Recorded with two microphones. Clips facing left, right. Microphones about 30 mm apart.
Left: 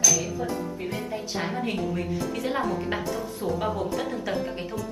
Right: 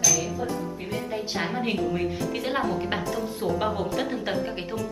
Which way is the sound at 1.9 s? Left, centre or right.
Right.